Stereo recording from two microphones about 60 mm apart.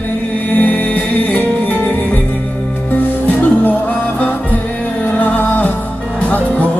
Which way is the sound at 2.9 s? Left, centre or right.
Left.